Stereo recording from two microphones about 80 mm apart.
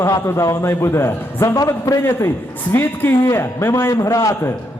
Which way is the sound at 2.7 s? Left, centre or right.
Left.